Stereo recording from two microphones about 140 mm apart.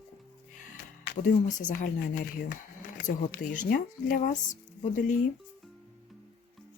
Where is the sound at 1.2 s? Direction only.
65° left (ahead or behind).